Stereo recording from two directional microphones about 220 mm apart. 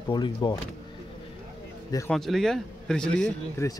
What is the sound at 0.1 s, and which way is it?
Speech, 20° left (ahead or behind).